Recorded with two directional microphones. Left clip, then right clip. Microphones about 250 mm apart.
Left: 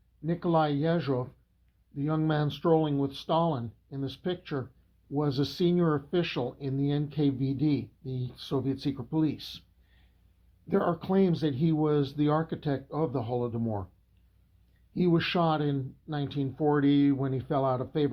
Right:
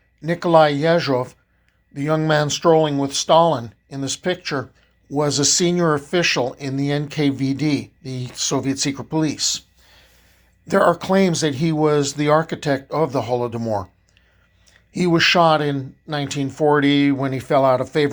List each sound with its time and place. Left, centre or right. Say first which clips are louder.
0.2 s speech: right 13 dB; right
10.7 s speech: right 12 dB; right
14.9 s speech: right 12 dB; right